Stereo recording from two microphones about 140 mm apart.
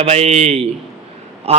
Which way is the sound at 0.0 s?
50° right (ahead or behind).